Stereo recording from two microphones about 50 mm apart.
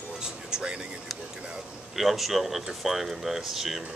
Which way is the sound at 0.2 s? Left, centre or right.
Centre.